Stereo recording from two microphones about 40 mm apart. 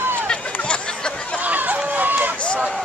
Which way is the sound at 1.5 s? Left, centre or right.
Right.